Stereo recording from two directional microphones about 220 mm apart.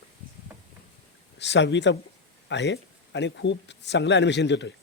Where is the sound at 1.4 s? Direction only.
55° left (ahead or behind).